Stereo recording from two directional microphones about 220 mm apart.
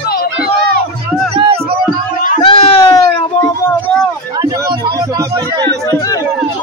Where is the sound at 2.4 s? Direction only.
25° left (ahead or behind).